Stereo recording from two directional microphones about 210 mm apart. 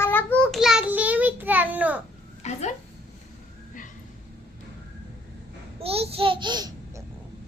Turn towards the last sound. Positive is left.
turn(degrees=-20)  # may be behind; listen again after turning